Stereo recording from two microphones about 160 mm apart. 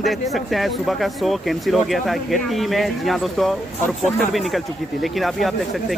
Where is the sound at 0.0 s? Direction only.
Centre (ahead or behind).